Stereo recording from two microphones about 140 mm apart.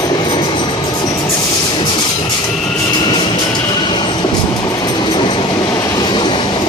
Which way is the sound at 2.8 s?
30° left (ahead or behind).